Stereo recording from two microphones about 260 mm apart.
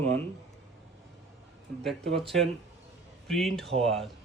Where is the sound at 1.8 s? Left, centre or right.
Centre.